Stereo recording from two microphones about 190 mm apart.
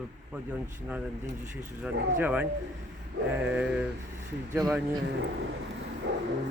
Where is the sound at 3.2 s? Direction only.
60° right (ahead or behind).